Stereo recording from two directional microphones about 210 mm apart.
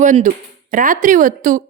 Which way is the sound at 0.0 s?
35° right (ahead or behind).